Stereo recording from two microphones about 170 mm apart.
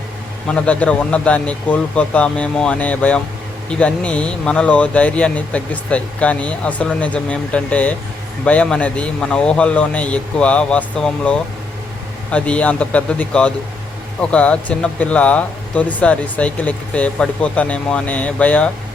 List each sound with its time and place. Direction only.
0.4 s speech: 5° left (ahead or behind)